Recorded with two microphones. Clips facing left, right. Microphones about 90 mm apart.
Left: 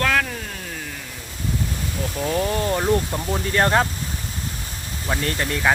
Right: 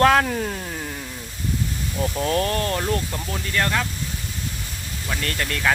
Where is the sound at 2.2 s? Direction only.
10° left (ahead or behind).